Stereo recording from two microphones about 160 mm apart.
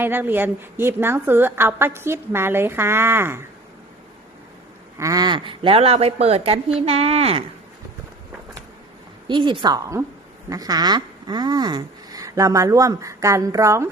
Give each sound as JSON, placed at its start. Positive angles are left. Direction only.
{"t": 0.0, "sound": "a woman's voice", "side_deg": -15}
{"t": 4.9, "sound": "speech", "side_deg": -20}
{"t": 9.2, "sound": "speech", "side_deg": -30}